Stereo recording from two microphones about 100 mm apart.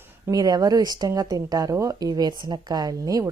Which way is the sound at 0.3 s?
40° right (ahead or behind).